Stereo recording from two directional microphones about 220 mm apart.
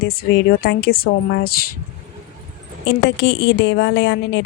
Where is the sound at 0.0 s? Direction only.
45° left (ahead or behind).